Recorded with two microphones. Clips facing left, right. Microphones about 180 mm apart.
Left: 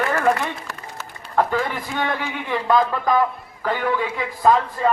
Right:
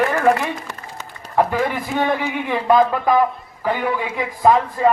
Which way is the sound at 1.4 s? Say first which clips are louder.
Right 2 dB; 10° right (ahead or behind).